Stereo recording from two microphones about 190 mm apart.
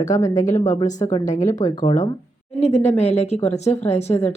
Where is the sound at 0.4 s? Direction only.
40° left (ahead or behind).